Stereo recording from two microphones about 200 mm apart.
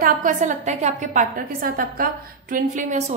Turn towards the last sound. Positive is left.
turn(degrees=-40)  # may be behind; listen again after turning